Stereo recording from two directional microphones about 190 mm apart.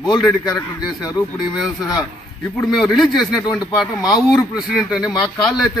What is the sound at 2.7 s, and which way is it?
Speech, centre (ahead or behind).